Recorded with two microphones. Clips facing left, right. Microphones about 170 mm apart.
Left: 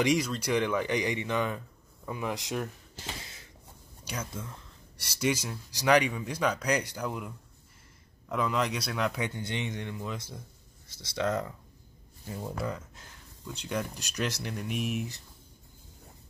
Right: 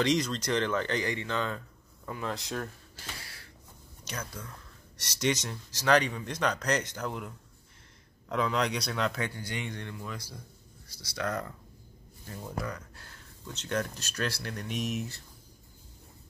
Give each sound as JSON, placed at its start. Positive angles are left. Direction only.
{"t": 0.0, "sound": "speech", "side_deg": 10}
{"t": 4.0, "sound": "a sound", "side_deg": 10}
{"t": 4.9, "sound": "speech", "side_deg": 10}
{"t": 12.4, "sound": "speech", "side_deg": 25}